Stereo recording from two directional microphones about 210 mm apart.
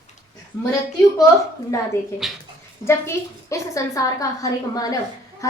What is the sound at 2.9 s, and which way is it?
A woman's voice, 15° left (ahead or behind).